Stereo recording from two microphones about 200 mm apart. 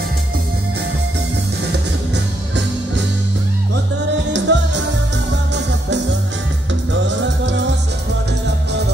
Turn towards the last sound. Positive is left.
turn(degrees=-65)  # may be behind; listen again after turning